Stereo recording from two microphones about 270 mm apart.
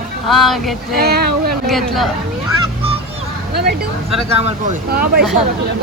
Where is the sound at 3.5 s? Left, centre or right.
Right.